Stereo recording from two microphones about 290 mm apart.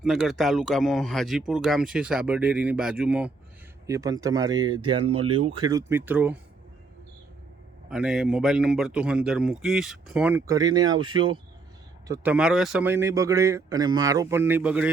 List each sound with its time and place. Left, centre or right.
0.0 s a man's voice: centre
7.9 s a man's voice: centre